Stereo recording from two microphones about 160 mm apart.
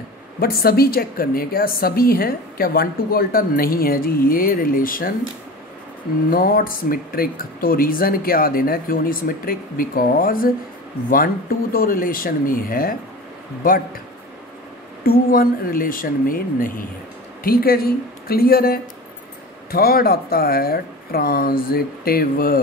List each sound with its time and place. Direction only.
0.4 s a woman's voice: 70° left (ahead or behind)
6.3 s speech: 65° left (ahead or behind)
15.0 s a woman's voice: 65° left (ahead or behind)